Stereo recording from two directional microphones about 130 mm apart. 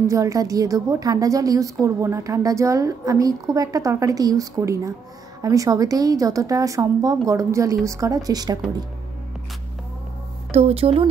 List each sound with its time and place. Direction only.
0.1 s a woman's voice: 25° right (ahead or behind)
10.5 s speech: 50° right (ahead or behind)